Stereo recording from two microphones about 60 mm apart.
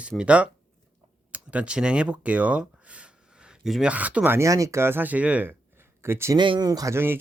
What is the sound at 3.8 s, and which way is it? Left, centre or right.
Speech, right.